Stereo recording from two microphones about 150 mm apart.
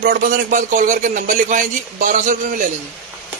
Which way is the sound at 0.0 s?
60° right (ahead or behind).